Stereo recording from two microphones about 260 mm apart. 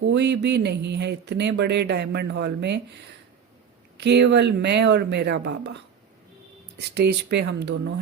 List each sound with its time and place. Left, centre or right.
0.0 s speech: right
4.0 s speech: right
7.3 s speech: right